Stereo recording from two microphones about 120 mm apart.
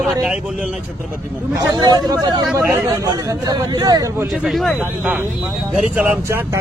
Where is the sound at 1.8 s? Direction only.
35° right (ahead or behind).